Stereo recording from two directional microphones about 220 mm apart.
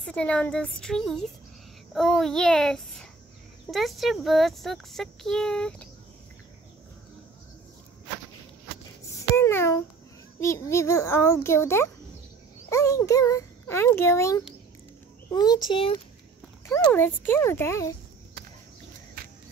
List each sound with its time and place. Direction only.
0.0 s speech: 5° left (ahead or behind)
9.1 s a sound: 10° left (ahead or behind)
10.4 s a child's voice: 10° left (ahead or behind)
16.6 s a child's voice: 10° left (ahead or behind)